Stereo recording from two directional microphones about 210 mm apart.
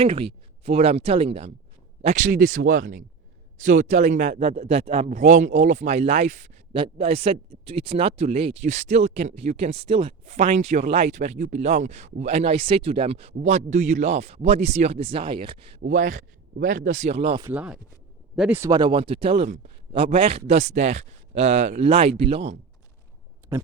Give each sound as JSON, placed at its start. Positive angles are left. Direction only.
{"t": 0.0, "sound": "speech", "side_deg": -25}
{"t": 15.8, "sound": "speech", "side_deg": -40}
{"t": 16.6, "sound": "speech", "side_deg": -65}
{"t": 16.8, "sound": "speech", "side_deg": -35}
{"t": 17.4, "sound": "speech", "side_deg": -5}